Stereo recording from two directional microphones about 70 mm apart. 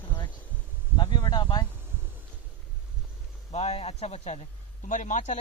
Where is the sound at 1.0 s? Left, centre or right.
Left.